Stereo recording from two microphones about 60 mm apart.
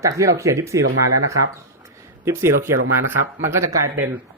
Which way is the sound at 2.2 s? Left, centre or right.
Right.